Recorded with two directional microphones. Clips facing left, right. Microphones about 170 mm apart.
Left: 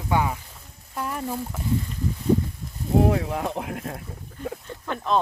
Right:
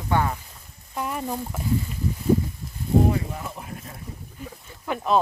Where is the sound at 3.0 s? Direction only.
75° left (ahead or behind).